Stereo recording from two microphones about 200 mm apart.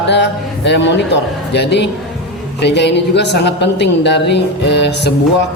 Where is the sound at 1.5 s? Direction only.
60° left (ahead or behind).